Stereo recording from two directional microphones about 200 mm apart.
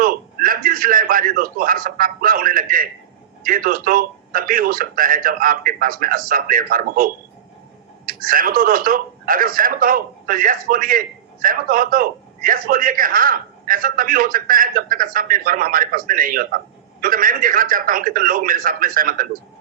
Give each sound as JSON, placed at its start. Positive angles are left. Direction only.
{"t": 0.0, "sound": "a man's voice", "side_deg": -45}